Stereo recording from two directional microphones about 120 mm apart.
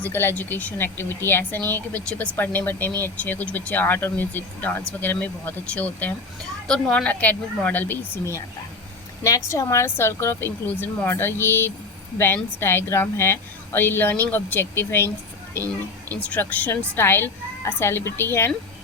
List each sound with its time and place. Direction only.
0.0 s a woman's voice: 20° left (ahead or behind)